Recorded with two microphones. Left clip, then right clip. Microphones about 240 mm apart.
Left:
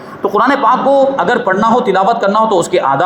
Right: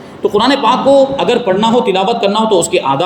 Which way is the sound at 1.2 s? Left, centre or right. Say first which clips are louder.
Even; centre.